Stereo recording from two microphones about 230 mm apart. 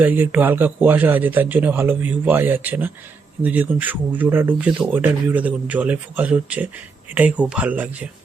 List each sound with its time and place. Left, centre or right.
0.0 s speech: centre